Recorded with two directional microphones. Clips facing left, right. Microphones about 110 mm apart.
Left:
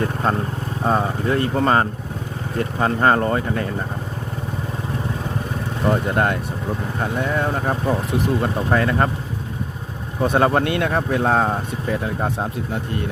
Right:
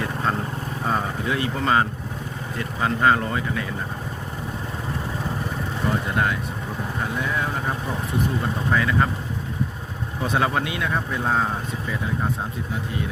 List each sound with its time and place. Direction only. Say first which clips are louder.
0.0 s vehicle: left 4 dB; 40° left (ahead or behind)
0.9 s speech: left 5 dB; 40° left (ahead or behind)
5.9 s speech: left 5 dB; 50° left (ahead or behind)
10.2 s speech: left 6 dB; 45° left (ahead or behind)